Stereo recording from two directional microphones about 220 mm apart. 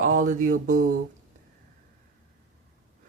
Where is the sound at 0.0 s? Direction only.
35° right (ahead or behind).